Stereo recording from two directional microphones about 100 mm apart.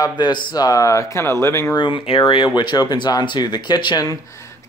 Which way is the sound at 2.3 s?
50° left (ahead or behind).